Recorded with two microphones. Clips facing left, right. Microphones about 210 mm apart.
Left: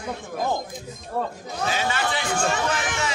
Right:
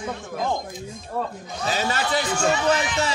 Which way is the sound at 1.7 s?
40° right (ahead or behind).